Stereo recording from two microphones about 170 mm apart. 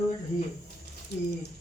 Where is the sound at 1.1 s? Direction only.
80° left.